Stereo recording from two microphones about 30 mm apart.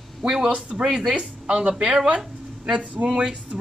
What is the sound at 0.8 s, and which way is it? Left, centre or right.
Speech, centre.